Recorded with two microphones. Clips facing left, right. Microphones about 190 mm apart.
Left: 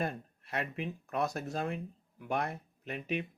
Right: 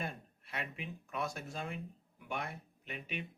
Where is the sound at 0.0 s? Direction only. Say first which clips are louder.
Left 7 dB; 40° left (ahead or behind).